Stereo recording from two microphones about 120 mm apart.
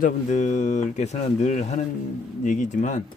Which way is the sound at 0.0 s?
85° left.